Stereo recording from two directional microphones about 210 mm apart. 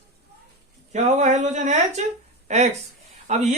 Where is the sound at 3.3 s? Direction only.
30° right (ahead or behind).